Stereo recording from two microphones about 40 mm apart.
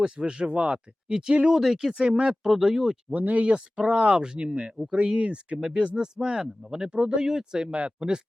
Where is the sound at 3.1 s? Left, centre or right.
Right.